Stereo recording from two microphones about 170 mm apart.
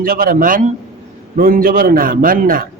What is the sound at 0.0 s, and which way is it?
A man's voice, 60° right (ahead or behind).